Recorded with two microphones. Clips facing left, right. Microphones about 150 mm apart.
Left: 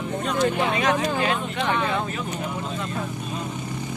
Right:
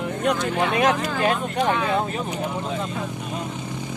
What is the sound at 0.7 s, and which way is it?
Speech, 50° right (ahead or behind).